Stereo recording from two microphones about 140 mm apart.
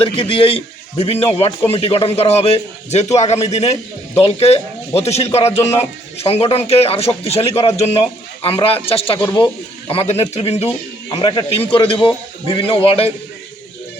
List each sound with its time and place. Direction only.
0.2 s a man's voice: 40° left (ahead or behind)
11.1 s a man's voice: 35° left (ahead or behind)